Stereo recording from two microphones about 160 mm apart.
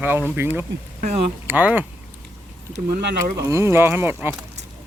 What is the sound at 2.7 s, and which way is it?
Speech, 90° right.